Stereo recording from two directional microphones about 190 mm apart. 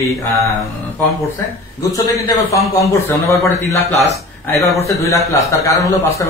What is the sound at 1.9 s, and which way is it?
A man's voice, 20° left (ahead or behind).